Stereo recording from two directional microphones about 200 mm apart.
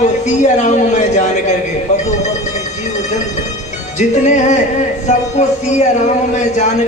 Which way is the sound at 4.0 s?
35° left (ahead or behind).